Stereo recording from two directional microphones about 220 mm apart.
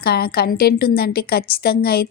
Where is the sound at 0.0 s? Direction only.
45° left (ahead or behind).